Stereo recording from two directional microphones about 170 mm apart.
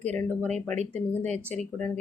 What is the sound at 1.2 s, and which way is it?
Speech, 40° right (ahead or behind).